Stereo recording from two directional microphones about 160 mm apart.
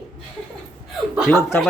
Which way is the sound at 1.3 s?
15° left (ahead or behind).